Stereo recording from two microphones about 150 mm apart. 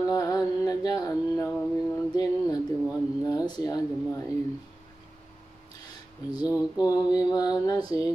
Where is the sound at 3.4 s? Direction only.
25° left (ahead or behind).